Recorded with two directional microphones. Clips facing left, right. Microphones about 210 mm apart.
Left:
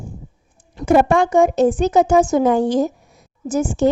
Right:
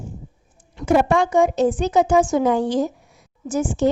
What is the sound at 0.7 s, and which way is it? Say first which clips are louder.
A woman's voice: left 3 dB; 45° left (ahead or behind).